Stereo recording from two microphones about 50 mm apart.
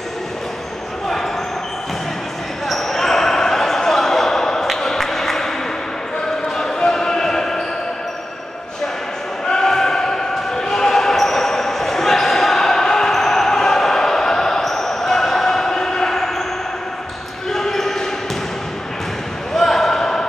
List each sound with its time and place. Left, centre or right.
2.7 s basketball bounce: centre
6.5 s basketball bounce: centre
9.5 s basketball bounce: centre
17.5 s basketball bounce: centre
19.5 s basketball bounce: centre